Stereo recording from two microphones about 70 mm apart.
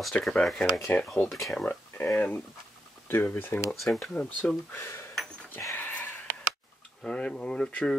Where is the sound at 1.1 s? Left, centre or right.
Left.